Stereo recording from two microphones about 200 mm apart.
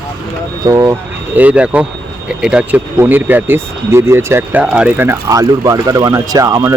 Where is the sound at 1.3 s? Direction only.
5° right (ahead or behind).